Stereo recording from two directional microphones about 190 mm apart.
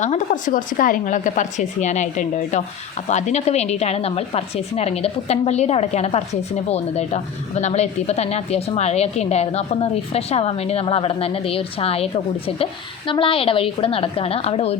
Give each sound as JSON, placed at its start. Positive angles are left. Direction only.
{"t": 0.0, "sound": "a woman's voice", "side_deg": 40}